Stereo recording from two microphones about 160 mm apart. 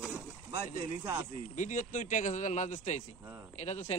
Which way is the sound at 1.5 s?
50° left (ahead or behind).